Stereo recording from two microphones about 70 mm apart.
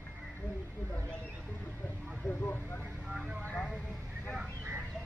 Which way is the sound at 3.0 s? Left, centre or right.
Centre.